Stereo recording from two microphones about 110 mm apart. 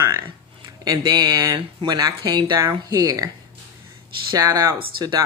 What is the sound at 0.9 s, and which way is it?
Speech, 40° right (ahead or behind).